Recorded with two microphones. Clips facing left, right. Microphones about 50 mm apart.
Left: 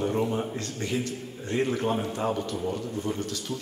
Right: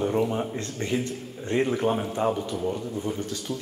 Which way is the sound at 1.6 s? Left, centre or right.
Centre.